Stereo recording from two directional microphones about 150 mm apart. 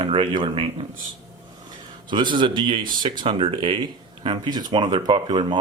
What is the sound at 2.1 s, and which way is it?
Speech, 30° right (ahead or behind).